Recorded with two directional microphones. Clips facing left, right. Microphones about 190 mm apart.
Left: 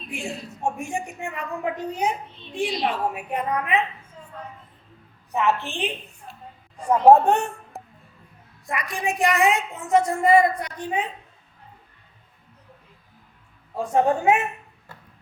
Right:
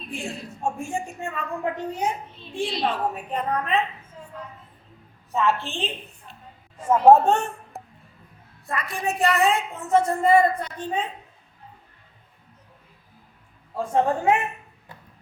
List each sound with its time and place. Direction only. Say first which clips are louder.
0.6 s a woman's voice: even; 15° left (ahead or behind)
4.2 s a sound: right 3 dB; 5° right (ahead or behind)
5.3 s a woman's voice: even; 15° left (ahead or behind)
6.7 s a woman's voice: even; centre (ahead or behind)
7.1 s a woman's voice: left 1 dB; 15° left (ahead or behind)
7.7 s music: even; centre (ahead or behind)
8.6 s a woman's voice: even; 15° left (ahead or behind)
13.7 s a woman's voice: left 2 dB; 15° left (ahead or behind)